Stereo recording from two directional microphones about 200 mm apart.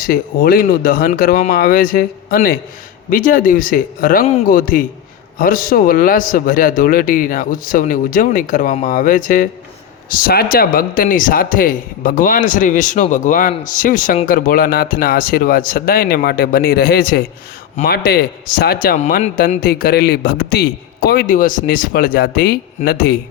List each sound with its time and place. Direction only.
0.0 s speech: 50° left (ahead or behind)
18.9 s speech: 35° left (ahead or behind)